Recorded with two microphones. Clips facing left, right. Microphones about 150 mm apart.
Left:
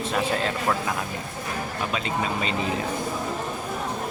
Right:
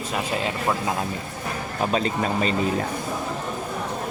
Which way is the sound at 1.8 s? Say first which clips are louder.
Right 6 dB; 40° right (ahead or behind).